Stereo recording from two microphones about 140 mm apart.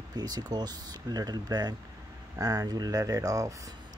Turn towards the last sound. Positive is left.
turn(degrees=-25)  # may be behind; listen again after turning